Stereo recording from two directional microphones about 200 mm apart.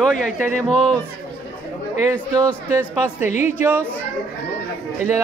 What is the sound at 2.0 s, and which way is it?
Speech, 15° right (ahead or behind).